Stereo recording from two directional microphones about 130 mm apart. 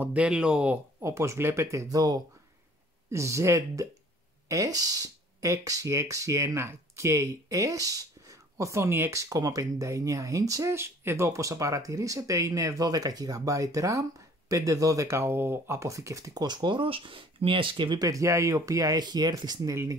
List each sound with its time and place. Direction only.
0.0 s speech: 10° right (ahead or behind)
1.0 s speech: 20° right (ahead or behind)